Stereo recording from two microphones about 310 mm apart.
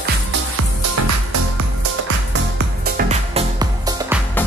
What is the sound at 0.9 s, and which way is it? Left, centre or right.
Music, right.